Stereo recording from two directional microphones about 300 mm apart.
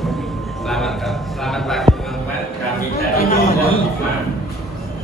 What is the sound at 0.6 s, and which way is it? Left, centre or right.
Music, centre.